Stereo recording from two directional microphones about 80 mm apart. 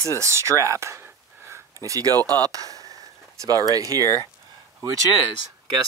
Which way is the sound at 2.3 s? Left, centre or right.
Right.